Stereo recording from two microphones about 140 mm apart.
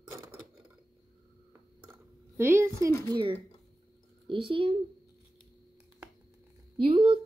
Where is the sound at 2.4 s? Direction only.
20° right (ahead or behind).